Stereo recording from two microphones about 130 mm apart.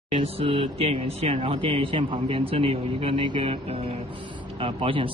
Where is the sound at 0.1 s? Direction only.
45° right (ahead or behind).